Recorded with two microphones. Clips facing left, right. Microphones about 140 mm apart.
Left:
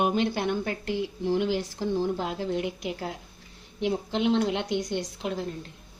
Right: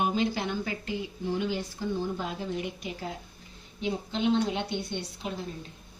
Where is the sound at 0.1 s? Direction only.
60° left (ahead or behind); by 5.3 s 90° left.